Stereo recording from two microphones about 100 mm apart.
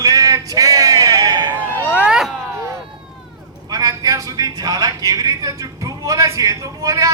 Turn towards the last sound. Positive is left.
turn(degrees=-35)  # may be behind; listen again after turning